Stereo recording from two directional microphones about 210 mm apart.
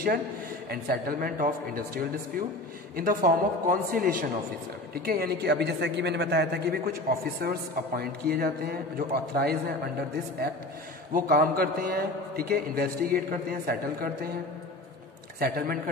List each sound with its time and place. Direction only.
0.7 s a woman's voice: 45° right (ahead or behind)
11.1 s a woman's voice: 45° right (ahead or behind)
15.3 s a woman's voice: 45° right (ahead or behind)